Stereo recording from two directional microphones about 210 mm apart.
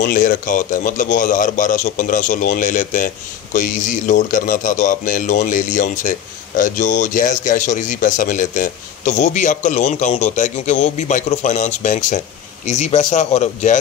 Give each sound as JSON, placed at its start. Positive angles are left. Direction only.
{"t": 0.0, "sound": "a man's voice", "side_deg": 40}